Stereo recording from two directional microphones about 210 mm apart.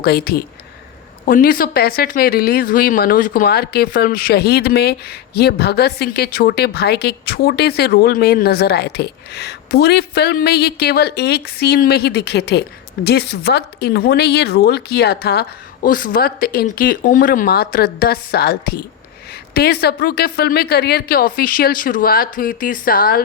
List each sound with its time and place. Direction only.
0.0 s a woman's voice: 50° left (ahead or behind)